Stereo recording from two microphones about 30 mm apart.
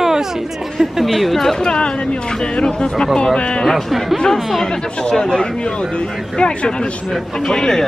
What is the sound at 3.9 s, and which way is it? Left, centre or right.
Speech, centre.